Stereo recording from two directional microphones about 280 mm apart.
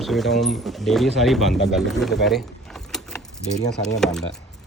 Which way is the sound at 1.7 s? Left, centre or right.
Centre.